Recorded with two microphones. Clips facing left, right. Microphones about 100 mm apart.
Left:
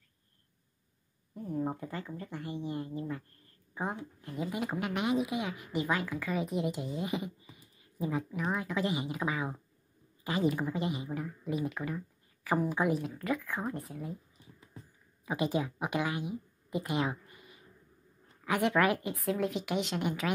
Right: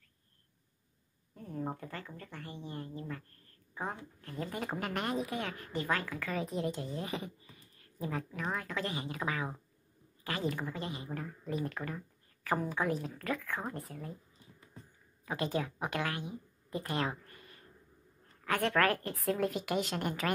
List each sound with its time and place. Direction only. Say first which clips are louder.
1.3 s a woman's voice: left 5 dB; 15° left (ahead or behind)
15.2 s a woman's voice: left 3 dB; 15° left (ahead or behind)
16.7 s a sound: left 3 dB; 10° left (ahead or behind)
18.4 s a woman's voice: left 2 dB; 15° left (ahead or behind)